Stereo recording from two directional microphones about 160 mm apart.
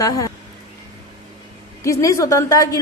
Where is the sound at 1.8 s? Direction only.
20° left (ahead or behind).